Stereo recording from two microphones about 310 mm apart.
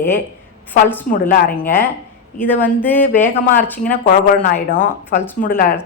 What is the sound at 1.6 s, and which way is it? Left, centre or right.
A woman's voice, centre.